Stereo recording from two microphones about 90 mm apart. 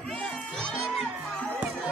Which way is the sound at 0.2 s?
10° left (ahead or behind).